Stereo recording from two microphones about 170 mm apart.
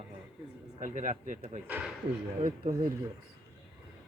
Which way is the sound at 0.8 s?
50° right (ahead or behind).